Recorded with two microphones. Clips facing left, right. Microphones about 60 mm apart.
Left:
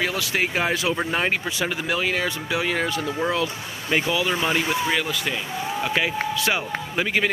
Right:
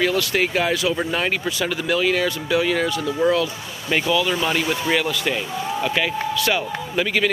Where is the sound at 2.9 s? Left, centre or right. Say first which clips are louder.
Right 5 dB; left.